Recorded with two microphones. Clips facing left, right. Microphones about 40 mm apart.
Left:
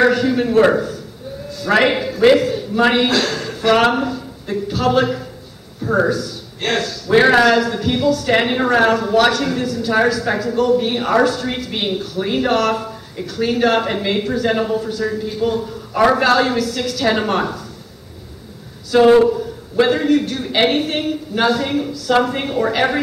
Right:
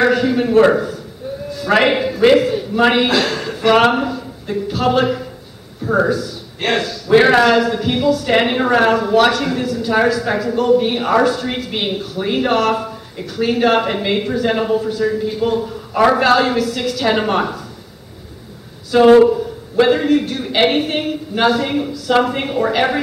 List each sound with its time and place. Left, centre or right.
0.0 s a man's voice: centre
18.9 s a man's voice: centre